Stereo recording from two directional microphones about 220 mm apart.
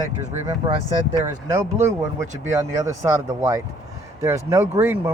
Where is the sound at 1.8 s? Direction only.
15° right (ahead or behind).